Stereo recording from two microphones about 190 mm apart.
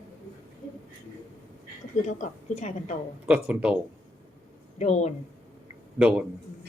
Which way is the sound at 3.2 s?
5° right (ahead or behind).